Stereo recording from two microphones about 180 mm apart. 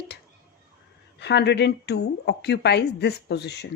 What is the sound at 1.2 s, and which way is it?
Speech, 70° left (ahead or behind).